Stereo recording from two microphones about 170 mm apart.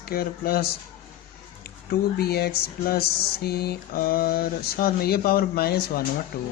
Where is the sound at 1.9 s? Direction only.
65° left (ahead or behind).